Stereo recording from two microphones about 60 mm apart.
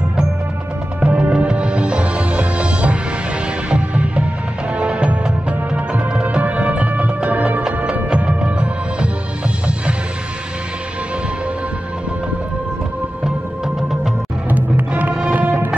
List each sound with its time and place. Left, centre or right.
1.0 s music: right
14.5 s music: right
15.4 s music: right